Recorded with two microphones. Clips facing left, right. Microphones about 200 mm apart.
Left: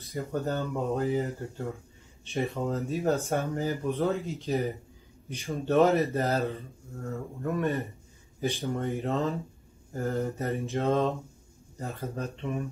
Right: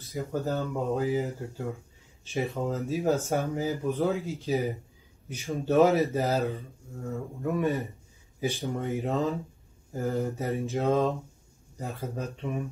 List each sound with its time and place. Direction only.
0.0 s speech: centre (ahead or behind)